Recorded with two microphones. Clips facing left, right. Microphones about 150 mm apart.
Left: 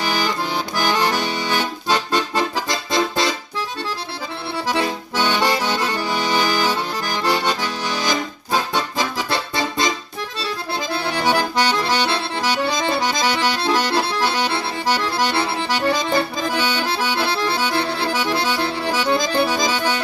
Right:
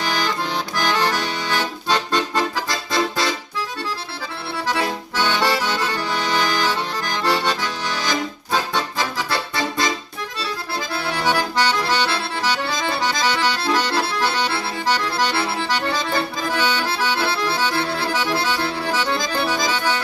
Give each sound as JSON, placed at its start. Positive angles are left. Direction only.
{"t": 0.0, "sound": "accordion", "side_deg": 5}
{"t": 4.7, "sound": "accordion", "side_deg": 15}